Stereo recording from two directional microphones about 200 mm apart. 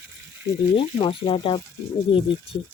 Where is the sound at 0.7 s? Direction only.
25° left (ahead or behind).